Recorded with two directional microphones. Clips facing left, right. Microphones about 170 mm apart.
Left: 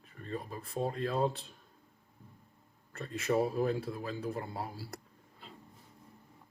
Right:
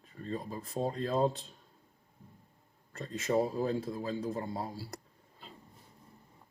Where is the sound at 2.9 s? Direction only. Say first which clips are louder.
Even; 25° right (ahead or behind).